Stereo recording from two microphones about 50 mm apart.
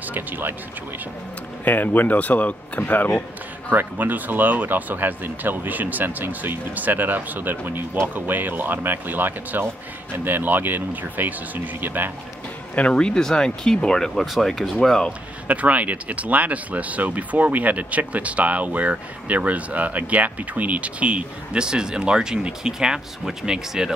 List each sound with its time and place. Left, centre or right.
0.1 s speech: right
1.6 s speech: left
3.7 s speech: right
12.7 s speech: left
14.1 s speech: centre
15.4 s speech: right; by 23.9 s centre